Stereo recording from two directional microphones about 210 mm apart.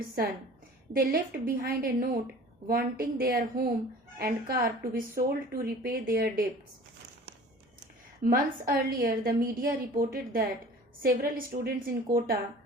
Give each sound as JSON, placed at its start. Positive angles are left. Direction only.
{"t": 0.2, "sound": "speech", "side_deg": -45}
{"t": 8.2, "sound": "speech", "side_deg": -45}